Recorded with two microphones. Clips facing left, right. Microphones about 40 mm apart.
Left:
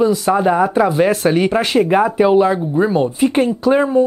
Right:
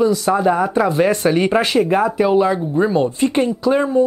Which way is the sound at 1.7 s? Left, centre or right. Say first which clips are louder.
Left 2 dB; centre.